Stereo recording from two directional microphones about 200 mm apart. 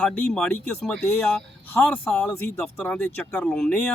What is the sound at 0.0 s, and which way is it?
Speech, 5° left (ahead or behind).